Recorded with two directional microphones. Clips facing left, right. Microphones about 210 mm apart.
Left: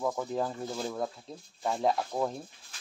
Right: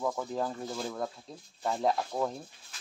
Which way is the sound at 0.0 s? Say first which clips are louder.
Left 1 dB; 5° left (ahead or behind).